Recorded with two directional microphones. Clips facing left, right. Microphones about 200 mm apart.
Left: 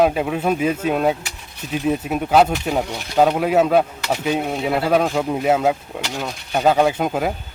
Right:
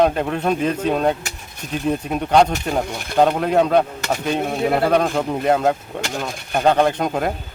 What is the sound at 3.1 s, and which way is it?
A man's voice, 5° left (ahead or behind).